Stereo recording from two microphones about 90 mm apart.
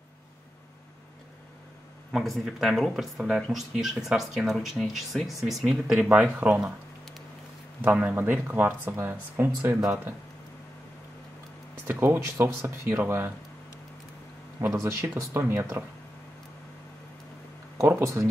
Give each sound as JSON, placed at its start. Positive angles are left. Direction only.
{"t": 2.1, "sound": "speech", "side_deg": 0}
{"t": 6.0, "sound": "speech", "side_deg": -15}
{"t": 7.8, "sound": "speech", "side_deg": -20}
{"t": 11.9, "sound": "speech", "side_deg": -25}
{"t": 14.6, "sound": "speech", "side_deg": -35}
{"t": 17.7, "sound": "speech", "side_deg": -30}